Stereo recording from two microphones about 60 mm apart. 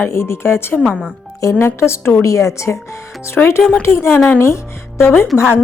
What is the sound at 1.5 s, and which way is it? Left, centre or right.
Speech, left.